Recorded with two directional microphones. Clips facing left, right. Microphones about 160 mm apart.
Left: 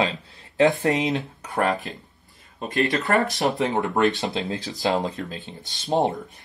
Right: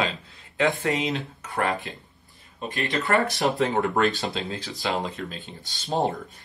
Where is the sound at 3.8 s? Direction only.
20° left (ahead or behind).